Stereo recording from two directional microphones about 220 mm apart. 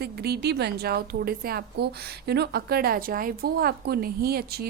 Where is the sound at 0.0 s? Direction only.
45° right (ahead or behind).